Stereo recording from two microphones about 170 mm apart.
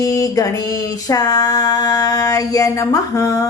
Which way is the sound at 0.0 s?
20° left (ahead or behind).